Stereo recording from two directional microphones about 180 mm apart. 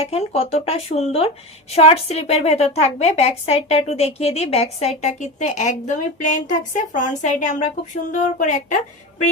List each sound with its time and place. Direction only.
0.0 s a woman's voice: 35° left (ahead or behind)